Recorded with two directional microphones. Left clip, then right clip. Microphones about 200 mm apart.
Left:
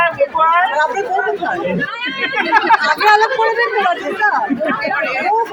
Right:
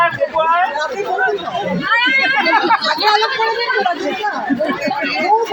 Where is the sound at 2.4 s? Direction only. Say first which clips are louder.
Left 1 dB; 30° left (ahead or behind).